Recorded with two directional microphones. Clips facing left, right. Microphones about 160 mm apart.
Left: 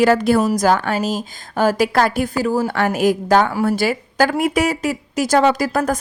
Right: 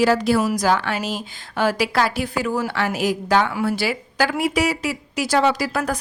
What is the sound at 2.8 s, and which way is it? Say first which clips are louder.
A woman's voice: left 5 dB; 50° left (ahead or behind).